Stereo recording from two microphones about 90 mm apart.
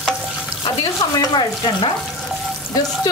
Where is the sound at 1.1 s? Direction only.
60° left (ahead or behind).